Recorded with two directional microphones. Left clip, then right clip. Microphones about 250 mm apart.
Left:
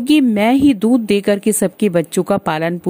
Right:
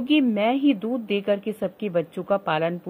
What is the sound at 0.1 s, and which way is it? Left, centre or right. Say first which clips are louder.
A woman's voice: left 8 dB; left.